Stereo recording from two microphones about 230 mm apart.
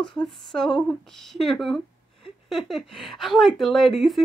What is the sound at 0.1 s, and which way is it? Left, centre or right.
Speech, centre.